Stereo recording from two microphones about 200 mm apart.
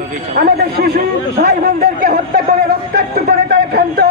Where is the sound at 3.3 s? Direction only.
50° right (ahead or behind).